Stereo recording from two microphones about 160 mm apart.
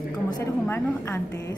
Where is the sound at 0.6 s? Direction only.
15° left (ahead or behind).